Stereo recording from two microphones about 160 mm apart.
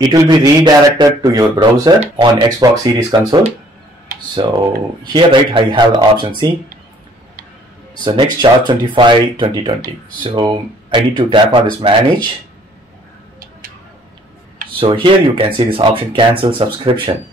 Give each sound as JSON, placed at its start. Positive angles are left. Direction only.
{"t": 0.1, "sound": "speech", "side_deg": -20}
{"t": 4.4, "sound": "speech", "side_deg": -30}
{"t": 8.0, "sound": "speech", "side_deg": -30}
{"t": 14.7, "sound": "speech", "side_deg": -30}